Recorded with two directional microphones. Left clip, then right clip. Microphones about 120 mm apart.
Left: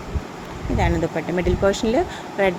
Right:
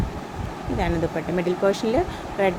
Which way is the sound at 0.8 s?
30° left (ahead or behind).